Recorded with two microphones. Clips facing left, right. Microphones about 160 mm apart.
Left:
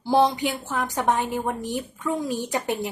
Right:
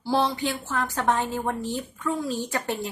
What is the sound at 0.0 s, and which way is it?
A woman's voice, 20° left (ahead or behind).